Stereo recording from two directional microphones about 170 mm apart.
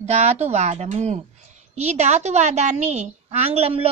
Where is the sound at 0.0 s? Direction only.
40° right (ahead or behind).